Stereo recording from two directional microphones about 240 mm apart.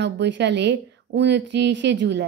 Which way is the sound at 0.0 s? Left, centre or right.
Right.